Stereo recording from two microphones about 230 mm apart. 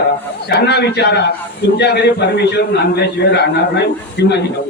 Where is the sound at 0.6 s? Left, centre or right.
Left.